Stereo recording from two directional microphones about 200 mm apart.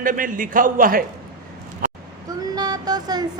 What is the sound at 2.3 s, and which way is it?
Vehicle, 20° right (ahead or behind).